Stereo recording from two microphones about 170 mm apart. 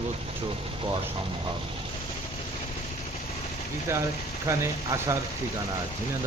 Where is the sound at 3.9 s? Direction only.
15° right (ahead or behind).